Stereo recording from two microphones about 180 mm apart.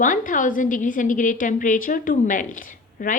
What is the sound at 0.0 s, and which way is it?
A woman's voice, 45° left (ahead or behind).